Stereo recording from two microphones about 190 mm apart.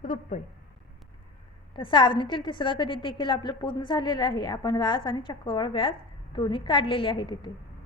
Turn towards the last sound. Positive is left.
turn(degrees=25)  # may be behind; listen again after turning